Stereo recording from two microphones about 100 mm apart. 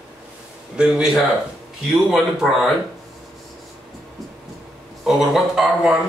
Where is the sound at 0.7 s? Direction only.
10° right (ahead or behind).